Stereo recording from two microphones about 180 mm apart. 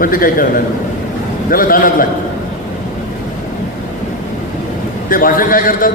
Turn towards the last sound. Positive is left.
turn(degrees=50)  # may be behind; listen again after turning